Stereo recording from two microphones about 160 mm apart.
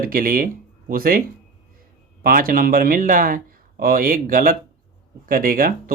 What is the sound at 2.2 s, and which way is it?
Speech, 60° right (ahead or behind).